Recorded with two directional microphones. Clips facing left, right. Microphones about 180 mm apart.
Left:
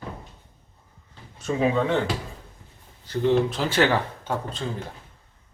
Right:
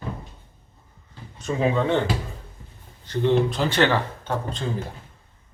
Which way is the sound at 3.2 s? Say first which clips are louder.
Right 1 dB; centre (ahead or behind).